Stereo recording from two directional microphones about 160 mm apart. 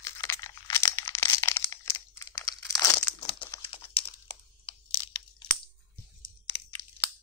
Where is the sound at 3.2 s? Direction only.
30° left (ahead or behind).